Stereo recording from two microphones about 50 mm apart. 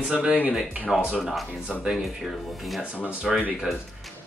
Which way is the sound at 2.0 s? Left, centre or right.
Centre.